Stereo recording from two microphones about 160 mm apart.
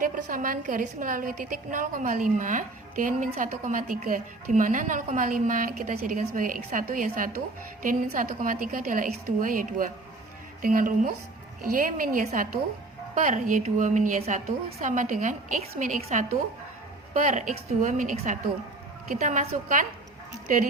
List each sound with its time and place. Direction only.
0.0 s a woman's voice: 60° right (ahead or behind)